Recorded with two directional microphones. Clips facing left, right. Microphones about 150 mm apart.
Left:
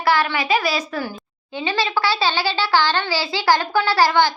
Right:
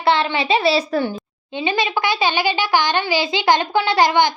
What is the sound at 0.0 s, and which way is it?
A woman's voice, 25° right (ahead or behind).